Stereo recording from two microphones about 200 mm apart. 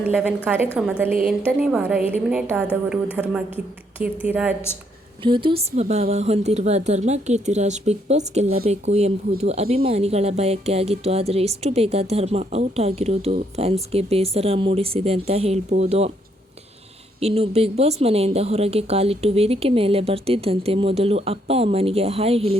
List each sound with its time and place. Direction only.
0.0 s a woman's voice: 5° right (ahead or behind)
5.2 s speech: 25° right (ahead or behind)
17.2 s speech: 30° right (ahead or behind)